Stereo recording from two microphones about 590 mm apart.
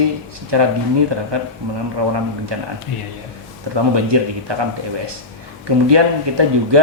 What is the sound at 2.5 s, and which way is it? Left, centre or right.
Speech, right.